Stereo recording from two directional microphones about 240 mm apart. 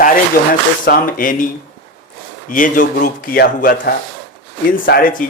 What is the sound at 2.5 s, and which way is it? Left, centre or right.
Speech, left.